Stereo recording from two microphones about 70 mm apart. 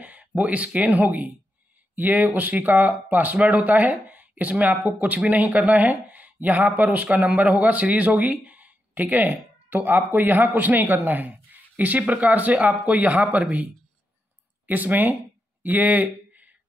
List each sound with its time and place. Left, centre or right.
0.0 s a man's voice: right
14.7 s speech: right
15.6 s a sound: right